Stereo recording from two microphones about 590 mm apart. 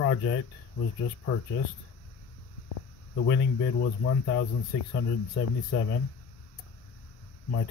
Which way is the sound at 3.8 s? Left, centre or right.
Centre.